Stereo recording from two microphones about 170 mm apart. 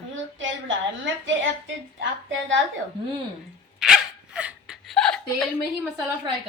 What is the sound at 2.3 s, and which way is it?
Speech, 90° right.